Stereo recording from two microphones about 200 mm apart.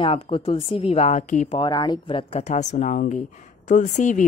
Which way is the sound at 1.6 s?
20° left (ahead or behind).